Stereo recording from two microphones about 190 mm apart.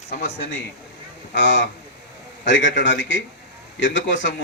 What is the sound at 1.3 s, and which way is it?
Speech, 70° left (ahead or behind).